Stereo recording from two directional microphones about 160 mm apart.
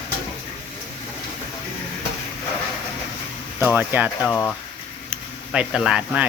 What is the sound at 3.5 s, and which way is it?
Speech, 10° right (ahead or behind).